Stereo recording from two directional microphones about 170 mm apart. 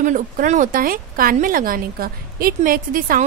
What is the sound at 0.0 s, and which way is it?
Speech, 50° right (ahead or behind).